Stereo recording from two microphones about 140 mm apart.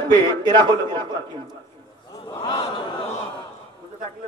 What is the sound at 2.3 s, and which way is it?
Speech, 35° left (ahead or behind).